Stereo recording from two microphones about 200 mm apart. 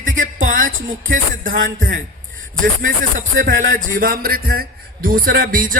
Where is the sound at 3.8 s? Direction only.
45° right (ahead or behind).